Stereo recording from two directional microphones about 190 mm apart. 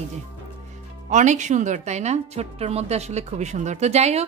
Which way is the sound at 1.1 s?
40° right (ahead or behind).